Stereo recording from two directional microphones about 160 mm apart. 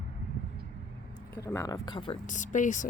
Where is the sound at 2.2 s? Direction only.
50° left (ahead or behind).